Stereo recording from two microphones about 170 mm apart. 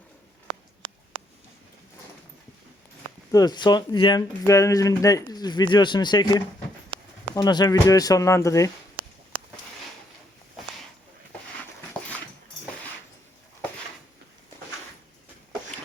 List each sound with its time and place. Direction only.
3.3 s speech: 25° left (ahead or behind)
7.4 s speech: 25° left (ahead or behind)
9.0 s a sound: 55° right (ahead or behind)